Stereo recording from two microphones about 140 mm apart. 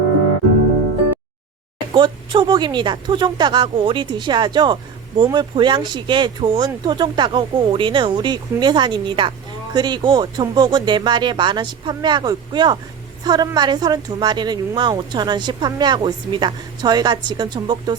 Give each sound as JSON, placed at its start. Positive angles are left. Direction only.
{"t": 1.9, "sound": "speech", "side_deg": -35}